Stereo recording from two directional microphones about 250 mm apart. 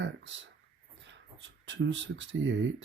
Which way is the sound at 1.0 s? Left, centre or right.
Right.